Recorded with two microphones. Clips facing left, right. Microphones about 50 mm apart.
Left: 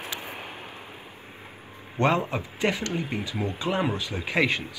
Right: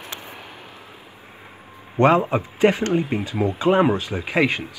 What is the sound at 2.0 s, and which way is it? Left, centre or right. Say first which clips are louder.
Speech: right 7 dB; right.